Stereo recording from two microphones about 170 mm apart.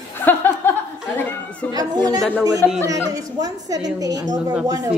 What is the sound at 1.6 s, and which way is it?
Chatter, 10° left (ahead or behind).